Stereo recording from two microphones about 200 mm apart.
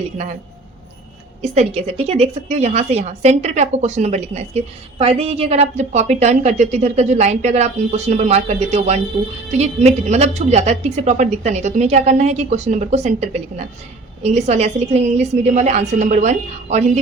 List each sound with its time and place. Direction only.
1.4 s a woman's voice: 30° right (ahead or behind)